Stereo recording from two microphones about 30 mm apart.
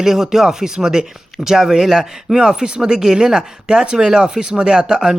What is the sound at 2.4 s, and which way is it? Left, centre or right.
Speech, right.